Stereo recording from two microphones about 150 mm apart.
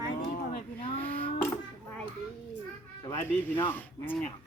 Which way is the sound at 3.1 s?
15° left (ahead or behind).